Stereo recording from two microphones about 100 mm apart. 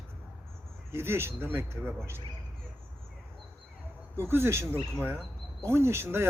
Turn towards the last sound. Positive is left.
turn(degrees=-25)  # may be behind; listen again after turning